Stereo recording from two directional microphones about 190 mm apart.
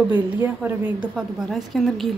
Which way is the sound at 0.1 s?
10° right (ahead or behind).